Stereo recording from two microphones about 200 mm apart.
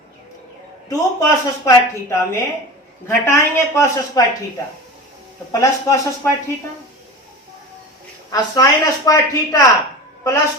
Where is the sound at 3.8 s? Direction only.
15° left (ahead or behind).